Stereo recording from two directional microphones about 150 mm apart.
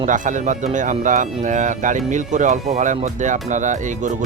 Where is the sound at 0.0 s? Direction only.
60° right (ahead or behind).